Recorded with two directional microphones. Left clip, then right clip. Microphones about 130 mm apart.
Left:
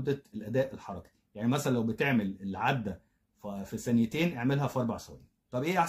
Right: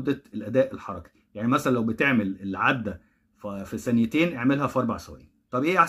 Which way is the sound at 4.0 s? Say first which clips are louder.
Right 7 dB; 30° left (ahead or behind).